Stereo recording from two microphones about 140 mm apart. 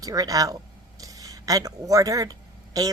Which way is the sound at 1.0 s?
25° right (ahead or behind).